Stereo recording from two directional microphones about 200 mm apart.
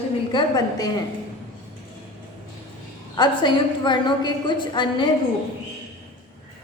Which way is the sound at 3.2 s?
20° left (ahead or behind).